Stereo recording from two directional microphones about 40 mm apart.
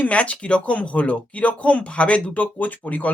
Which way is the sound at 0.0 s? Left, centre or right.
Left.